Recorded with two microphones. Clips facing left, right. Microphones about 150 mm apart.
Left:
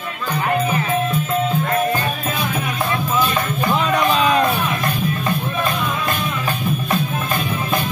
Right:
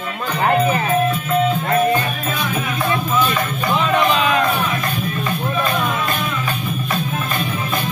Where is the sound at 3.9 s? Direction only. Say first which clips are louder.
Even; 35° left (ahead or behind).